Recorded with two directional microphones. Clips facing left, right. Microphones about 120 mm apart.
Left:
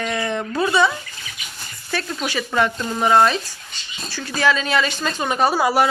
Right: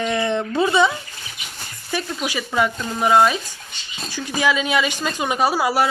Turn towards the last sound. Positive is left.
turn(degrees=-5)  # may be behind; listen again after turning